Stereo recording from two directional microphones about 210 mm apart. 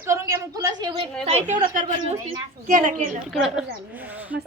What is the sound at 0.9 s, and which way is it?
A woman's voice, 30° right (ahead or behind).